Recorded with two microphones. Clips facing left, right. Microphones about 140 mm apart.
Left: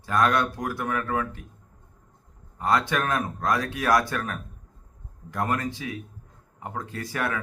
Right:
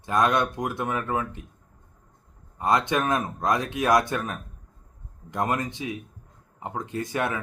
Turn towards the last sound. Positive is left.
turn(degrees=-20)  # may be behind; listen again after turning